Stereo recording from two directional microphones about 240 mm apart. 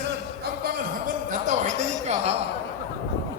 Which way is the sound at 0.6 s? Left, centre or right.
Right.